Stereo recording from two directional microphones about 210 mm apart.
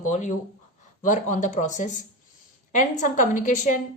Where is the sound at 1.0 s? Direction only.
35° left (ahead or behind).